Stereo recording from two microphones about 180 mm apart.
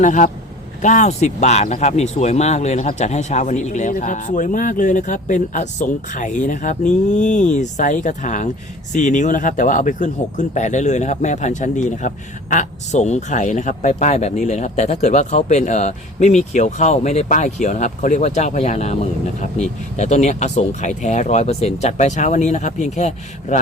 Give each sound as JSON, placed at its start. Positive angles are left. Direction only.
{"t": 0.0, "sound": "speech", "side_deg": 45}